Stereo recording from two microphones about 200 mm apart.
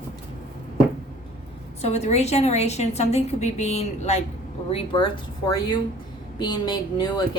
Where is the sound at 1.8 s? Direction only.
35° left (ahead or behind).